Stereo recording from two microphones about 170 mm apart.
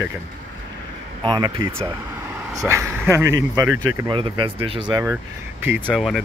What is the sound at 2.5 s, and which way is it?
Speech, 15° right (ahead or behind).